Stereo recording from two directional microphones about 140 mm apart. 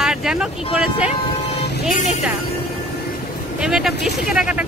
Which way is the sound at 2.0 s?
55° left (ahead or behind).